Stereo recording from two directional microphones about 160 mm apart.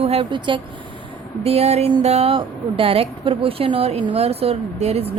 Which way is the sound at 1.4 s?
40° right (ahead or behind).